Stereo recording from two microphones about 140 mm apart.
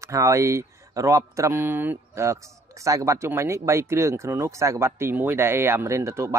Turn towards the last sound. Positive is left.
turn(degrees=-20)  # may be behind; listen again after turning